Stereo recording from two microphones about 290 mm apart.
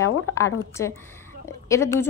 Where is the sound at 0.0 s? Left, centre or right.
Centre.